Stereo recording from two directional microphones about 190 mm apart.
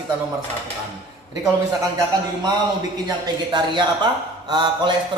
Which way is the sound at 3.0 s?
25° right (ahead or behind).